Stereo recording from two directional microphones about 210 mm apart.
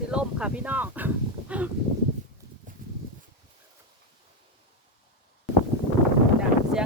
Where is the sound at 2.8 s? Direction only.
40° right (ahead or behind).